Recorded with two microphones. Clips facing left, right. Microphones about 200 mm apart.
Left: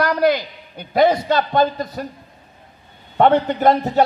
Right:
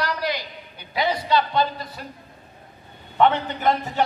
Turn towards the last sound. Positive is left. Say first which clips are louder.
# left 7 dB
turn(degrees=40)  # may be behind; listen again after turning